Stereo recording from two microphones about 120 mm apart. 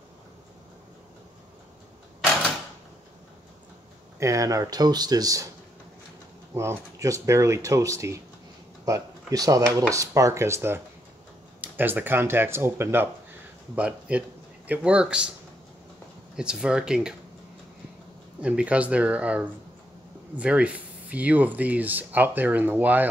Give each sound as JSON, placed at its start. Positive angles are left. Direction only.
{"t": 4.2, "sound": "speech", "side_deg": -25}
{"t": 6.5, "sound": "speech", "side_deg": -25}
{"t": 16.3, "sound": "speech", "side_deg": -5}
{"t": 18.4, "sound": "speech", "side_deg": -10}